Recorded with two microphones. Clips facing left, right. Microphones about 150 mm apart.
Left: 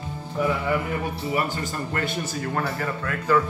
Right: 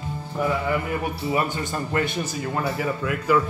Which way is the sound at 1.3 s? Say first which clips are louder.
Right 1 dB; 20° right (ahead or behind).